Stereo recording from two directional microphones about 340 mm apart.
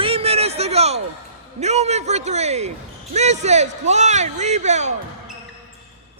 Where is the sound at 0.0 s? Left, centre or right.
Centre.